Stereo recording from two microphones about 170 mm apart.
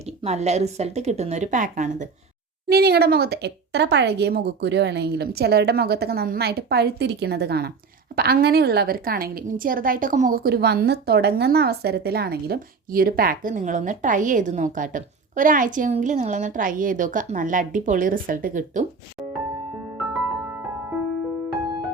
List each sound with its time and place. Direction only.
0.0 s a woman's voice: 40° right (ahead or behind)
2.6 s a woman's voice: 65° right (ahead or behind); by 18.9 s 50° right (ahead or behind)